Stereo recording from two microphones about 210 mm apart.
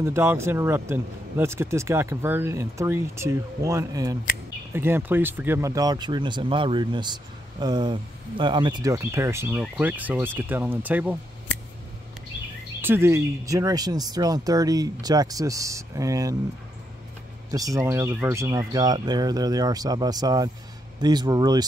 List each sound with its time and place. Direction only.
0.0 s speech: 10° right (ahead or behind)
12.8 s speech: 10° right (ahead or behind)
17.5 s speech: 15° right (ahead or behind)